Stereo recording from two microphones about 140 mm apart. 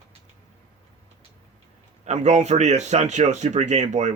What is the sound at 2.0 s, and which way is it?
Speech, 55° right (ahead or behind).